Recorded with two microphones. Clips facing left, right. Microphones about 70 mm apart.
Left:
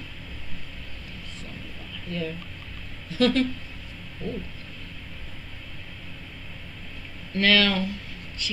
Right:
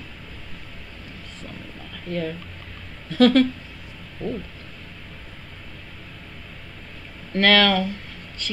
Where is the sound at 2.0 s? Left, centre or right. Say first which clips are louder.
Right 4 dB; right.